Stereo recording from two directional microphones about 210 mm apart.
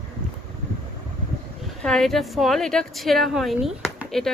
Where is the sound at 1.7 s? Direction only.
5° left (ahead or behind).